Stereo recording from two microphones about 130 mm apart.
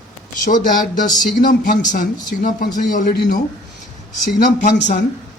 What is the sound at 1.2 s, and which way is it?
Speech, 90° left.